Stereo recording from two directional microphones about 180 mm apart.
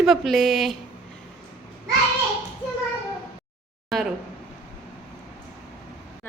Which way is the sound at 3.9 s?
Centre (ahead or behind).